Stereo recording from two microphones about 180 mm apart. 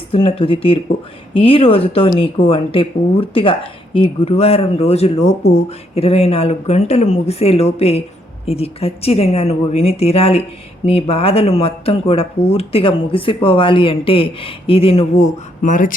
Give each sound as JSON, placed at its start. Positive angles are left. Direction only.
{"t": 0.1, "sound": "speech", "side_deg": 30}